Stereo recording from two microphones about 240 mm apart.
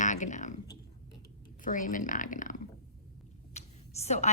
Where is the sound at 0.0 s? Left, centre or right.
Left.